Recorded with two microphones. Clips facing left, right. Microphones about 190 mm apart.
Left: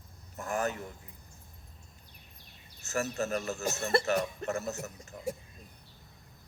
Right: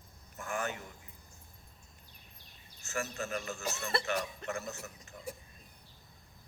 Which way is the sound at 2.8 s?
40° left (ahead or behind).